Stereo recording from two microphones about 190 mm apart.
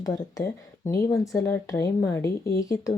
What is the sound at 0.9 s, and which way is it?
Speech, 20° left (ahead or behind).